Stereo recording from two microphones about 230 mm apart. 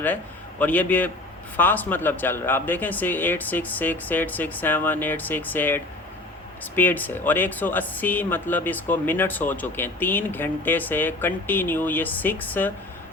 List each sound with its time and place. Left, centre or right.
0.6 s speech: centre